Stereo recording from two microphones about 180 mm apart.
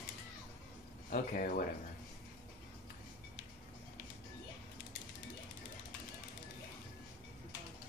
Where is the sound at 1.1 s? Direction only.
50° left (ahead or behind).